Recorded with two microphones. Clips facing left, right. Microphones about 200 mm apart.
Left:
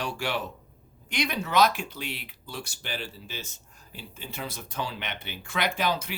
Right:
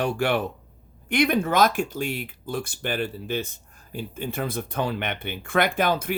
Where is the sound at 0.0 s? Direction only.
55° right (ahead or behind).